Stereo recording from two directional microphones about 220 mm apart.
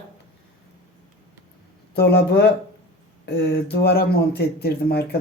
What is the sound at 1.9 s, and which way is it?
Speech, 45° left (ahead or behind).